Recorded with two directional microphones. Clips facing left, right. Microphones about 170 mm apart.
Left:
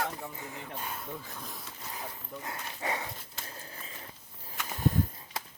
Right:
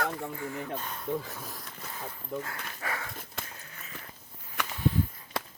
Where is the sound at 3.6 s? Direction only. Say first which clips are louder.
Left 3 dB; 30° left (ahead or behind).